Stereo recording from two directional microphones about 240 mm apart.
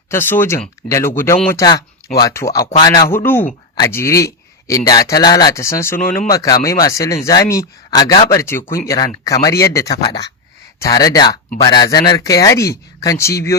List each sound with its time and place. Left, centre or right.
0.1 s speech: centre